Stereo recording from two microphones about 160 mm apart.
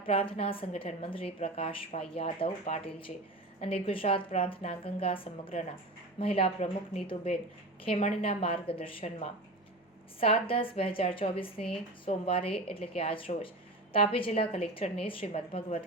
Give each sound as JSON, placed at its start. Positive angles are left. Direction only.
{"t": 0.1, "sound": "a woman's voice", "side_deg": 35}
{"t": 3.8, "sound": "a woman's voice", "side_deg": 35}
{"t": 10.2, "sound": "a woman's voice", "side_deg": 35}